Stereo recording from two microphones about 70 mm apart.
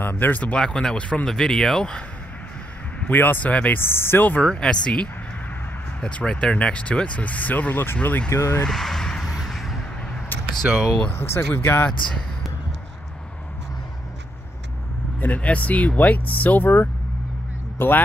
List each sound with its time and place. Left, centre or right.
0.0 s speech: left
0.6 s speech: centre
1.3 s speech: centre
3.0 s speech: left
3.8 s speech: left
4.5 s speech: centre; by 8.2 s left
8.3 s speech: left
8.6 s a sound: centre
11.1 s speech: left
15.1 s speech: left